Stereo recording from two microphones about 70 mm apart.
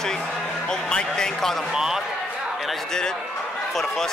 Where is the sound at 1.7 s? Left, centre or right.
Centre.